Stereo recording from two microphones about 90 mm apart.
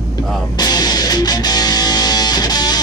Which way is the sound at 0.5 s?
50° left (ahead or behind).